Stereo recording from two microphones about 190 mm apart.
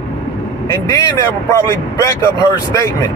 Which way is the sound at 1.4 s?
15° left (ahead or behind).